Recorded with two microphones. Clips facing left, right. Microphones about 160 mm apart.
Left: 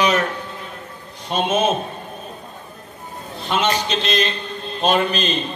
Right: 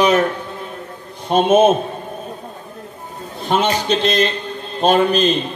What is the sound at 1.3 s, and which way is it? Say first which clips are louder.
Speech: right 7 dB; 50° right (ahead or behind).